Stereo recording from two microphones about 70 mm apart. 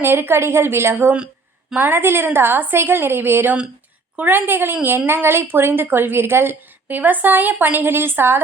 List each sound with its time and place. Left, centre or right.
0.0 s speech: right